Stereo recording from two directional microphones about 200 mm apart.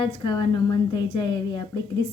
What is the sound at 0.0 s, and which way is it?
A woman's voice, 25° left (ahead or behind).